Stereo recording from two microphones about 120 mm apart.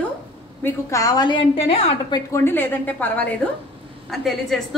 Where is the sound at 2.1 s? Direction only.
25° left (ahead or behind).